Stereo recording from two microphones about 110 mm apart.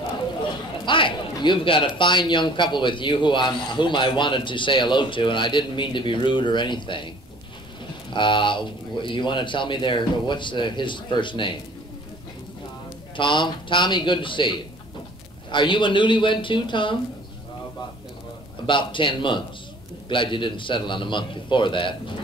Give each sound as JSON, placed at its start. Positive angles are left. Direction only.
{"t": 0.8, "sound": "a man's voice", "side_deg": 50}
{"t": 8.1, "sound": "a man's voice", "side_deg": 45}
{"t": 13.1, "sound": "a man's voice", "side_deg": 45}
{"t": 18.7, "sound": "a man's voice", "side_deg": 50}